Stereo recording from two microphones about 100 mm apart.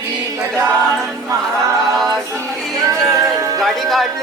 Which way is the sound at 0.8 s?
5° left (ahead or behind).